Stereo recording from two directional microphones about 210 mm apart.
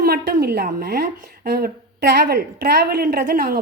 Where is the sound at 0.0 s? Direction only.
45° right (ahead or behind).